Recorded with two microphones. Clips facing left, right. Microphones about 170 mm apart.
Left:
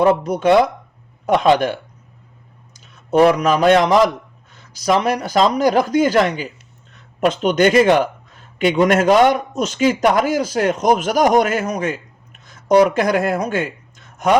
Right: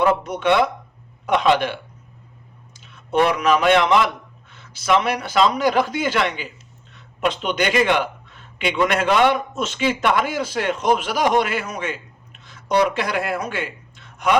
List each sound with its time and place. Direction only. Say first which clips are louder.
0.0 s a man's voice: left 4 dB; 40° left (ahead or behind)